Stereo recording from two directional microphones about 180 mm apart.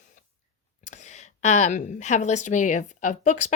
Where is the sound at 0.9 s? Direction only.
40° left (ahead or behind).